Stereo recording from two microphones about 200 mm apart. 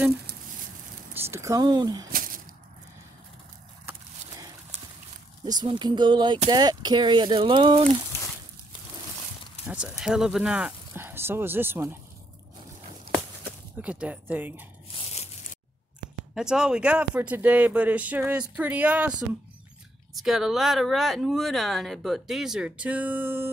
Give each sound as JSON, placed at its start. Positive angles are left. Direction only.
{"t": 1.3, "sound": "speech", "side_deg": -15}
{"t": 2.1, "sound": "a sound", "side_deg": -45}
{"t": 5.4, "sound": "speech", "side_deg": -20}
{"t": 9.7, "sound": "speech", "side_deg": -5}
{"t": 13.7, "sound": "speech", "side_deg": -5}
{"t": 16.3, "sound": "speech", "side_deg": -5}
{"t": 20.2, "sound": "speech", "side_deg": 0}